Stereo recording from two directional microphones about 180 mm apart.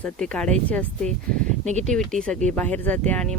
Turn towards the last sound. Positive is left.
turn(degrees=5)  # may be behind; listen again after turning